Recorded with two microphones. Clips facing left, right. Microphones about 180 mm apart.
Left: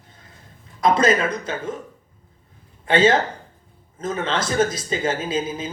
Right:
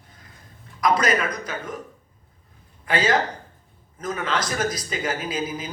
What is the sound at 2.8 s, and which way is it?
A man's voice, 25° left (ahead or behind).